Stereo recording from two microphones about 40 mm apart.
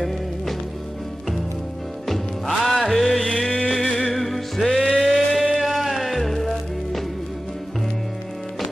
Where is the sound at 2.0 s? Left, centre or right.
Centre.